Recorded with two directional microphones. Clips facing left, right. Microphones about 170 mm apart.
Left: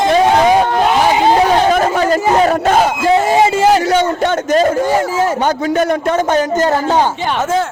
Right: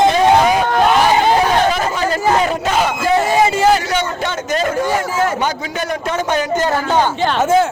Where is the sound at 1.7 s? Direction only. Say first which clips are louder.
Left 6 dB; 50° left (ahead or behind).